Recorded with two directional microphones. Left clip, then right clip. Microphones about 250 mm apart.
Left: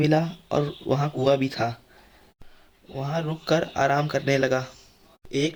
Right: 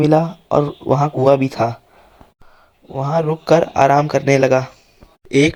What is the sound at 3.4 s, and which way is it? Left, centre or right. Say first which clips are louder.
Speech: right 10 dB; right.